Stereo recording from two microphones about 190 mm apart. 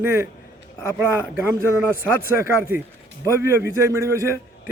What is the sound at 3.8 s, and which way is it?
Speech, 15° right (ahead or behind).